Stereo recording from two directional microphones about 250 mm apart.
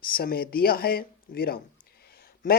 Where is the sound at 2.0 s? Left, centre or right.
Left.